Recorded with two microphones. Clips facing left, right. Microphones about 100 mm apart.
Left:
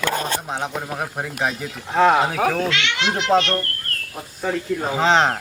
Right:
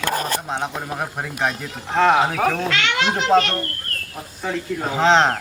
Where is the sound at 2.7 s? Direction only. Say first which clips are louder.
Right 2 dB; 45° right (ahead or behind).